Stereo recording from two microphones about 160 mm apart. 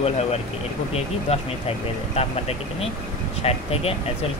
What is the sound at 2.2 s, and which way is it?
Speech, 40° left (ahead or behind).